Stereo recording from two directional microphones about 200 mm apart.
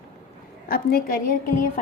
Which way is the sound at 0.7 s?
50° left (ahead or behind).